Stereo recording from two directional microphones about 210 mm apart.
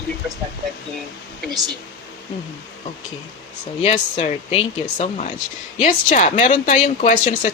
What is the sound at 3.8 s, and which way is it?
A woman's voice, 30° left (ahead or behind).